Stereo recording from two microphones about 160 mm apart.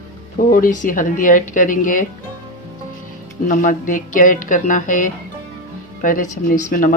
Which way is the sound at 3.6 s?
55° left (ahead or behind).